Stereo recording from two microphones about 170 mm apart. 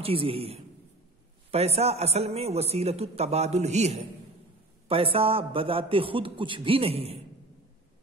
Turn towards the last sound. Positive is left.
turn(degrees=-35)  # may be behind; listen again after turning